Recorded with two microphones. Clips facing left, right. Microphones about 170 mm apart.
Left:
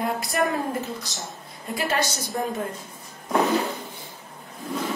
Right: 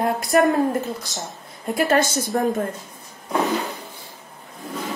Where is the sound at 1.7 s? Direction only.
55° right (ahead or behind).